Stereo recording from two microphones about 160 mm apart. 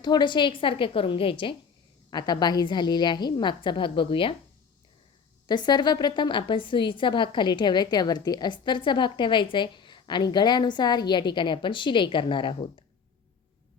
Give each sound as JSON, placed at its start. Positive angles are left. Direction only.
{"t": 0.0, "sound": "a woman's voice", "side_deg": 25}
{"t": 5.5, "sound": "a woman's voice", "side_deg": 25}